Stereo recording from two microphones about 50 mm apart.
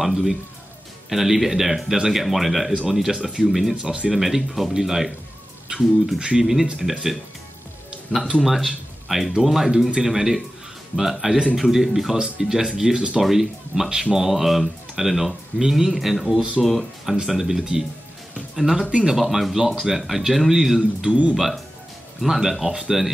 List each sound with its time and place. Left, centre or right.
0.0 s speech: centre
3.8 s speech: centre
4.1 s speech: centre
6.1 s speech: centre
13.2 s speech: centre
18.9 s speech: centre
19.1 s speech: centre
21.1 s speech: right
22.2 s speech: centre